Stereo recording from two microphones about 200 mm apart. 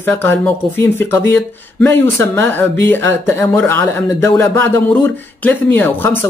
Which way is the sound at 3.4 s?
10° left (ahead or behind).